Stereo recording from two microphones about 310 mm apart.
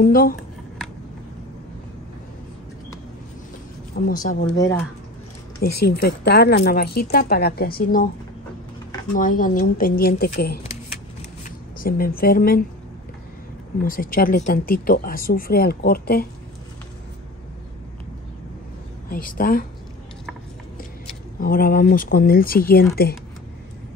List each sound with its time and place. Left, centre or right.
0.0 s speech: left
3.9 s speech: left
4.5 s a woman's voice: centre
5.6 s speech: left
9.1 s speech: left
13.7 s speech: left
19.0 s speech: left
21.4 s speech: left